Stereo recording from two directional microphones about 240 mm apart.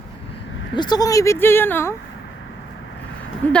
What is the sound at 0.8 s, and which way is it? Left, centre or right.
A woman's voice, centre.